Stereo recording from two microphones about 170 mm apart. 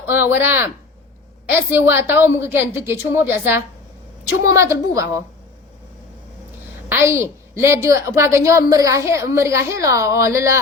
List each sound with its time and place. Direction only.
0.0 s a woman's voice: 10° right (ahead or behind)
6.8 s a woman's voice: 15° right (ahead or behind)